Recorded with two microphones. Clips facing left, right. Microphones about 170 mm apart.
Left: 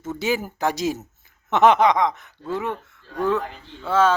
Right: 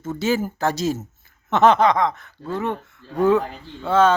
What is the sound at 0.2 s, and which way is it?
Speech, 15° left (ahead or behind).